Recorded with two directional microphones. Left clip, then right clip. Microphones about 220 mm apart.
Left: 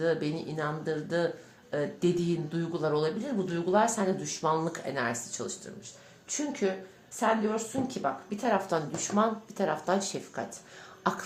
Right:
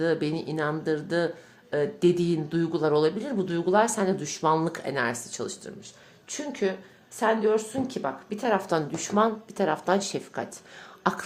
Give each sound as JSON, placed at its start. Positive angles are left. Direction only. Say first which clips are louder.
{"t": 0.0, "sound": "speech", "louder": "right 3 dB", "side_deg": -40}